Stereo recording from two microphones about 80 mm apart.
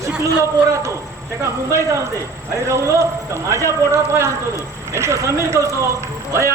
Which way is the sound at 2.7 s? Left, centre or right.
Right.